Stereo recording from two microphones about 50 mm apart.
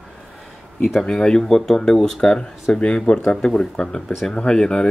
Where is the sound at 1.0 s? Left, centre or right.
Centre.